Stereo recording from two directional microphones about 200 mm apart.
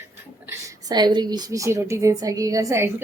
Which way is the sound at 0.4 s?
15° right (ahead or behind).